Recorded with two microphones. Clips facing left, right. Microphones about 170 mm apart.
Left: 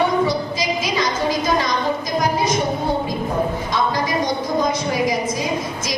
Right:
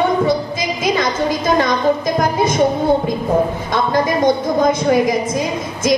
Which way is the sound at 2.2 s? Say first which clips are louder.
Right 3 dB; 50° right (ahead or behind).